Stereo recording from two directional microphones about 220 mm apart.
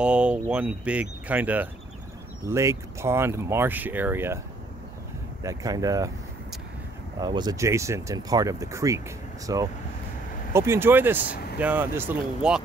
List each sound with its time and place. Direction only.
0.0 s speech: 5° right (ahead or behind)
5.4 s speech: 15° right (ahead or behind)
7.2 s speech: 20° right (ahead or behind); by 12.6 s 5° right (ahead or behind)